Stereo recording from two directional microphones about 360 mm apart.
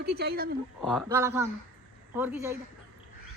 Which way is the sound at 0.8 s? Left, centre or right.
Centre.